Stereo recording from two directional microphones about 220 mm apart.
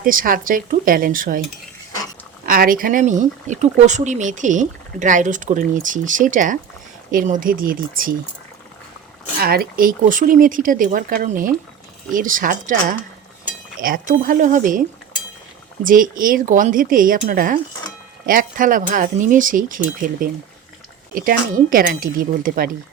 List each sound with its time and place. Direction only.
0.0 s speech: 40° right (ahead or behind)
2.5 s speech: 40° right (ahead or behind)
9.4 s speech: 45° right (ahead or behind)
21.2 s speech: 40° right (ahead or behind)